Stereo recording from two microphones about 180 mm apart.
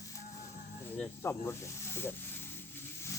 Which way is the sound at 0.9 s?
10° left (ahead or behind).